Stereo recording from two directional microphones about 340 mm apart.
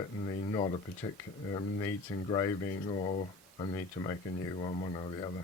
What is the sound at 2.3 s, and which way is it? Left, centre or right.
Speech, centre.